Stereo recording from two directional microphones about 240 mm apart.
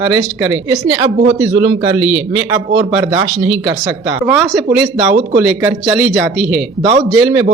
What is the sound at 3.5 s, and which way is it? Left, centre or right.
A man's voice, centre.